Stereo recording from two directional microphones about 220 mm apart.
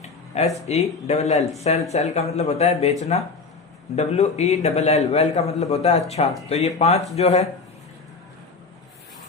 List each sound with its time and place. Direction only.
0.3 s a man's voice: 30° left (ahead or behind)